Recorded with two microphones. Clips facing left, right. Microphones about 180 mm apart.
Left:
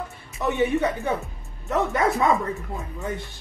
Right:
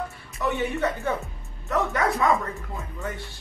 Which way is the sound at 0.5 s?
15° left (ahead or behind).